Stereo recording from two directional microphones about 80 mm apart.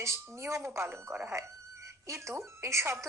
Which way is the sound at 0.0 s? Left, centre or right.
Right.